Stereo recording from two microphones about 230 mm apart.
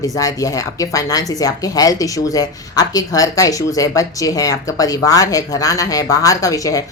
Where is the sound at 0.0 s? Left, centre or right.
Centre.